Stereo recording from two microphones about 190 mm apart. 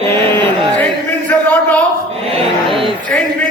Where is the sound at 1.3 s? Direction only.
10° left (ahead or behind).